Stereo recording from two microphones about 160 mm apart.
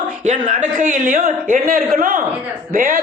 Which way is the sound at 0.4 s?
55° right (ahead or behind).